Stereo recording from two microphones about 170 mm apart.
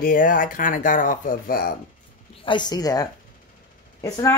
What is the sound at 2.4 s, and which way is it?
Speech, 25° left (ahead or behind).